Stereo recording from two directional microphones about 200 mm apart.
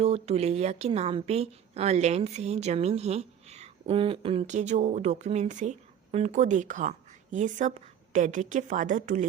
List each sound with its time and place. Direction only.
0.0 s a woman's voice: 30° right (ahead or behind)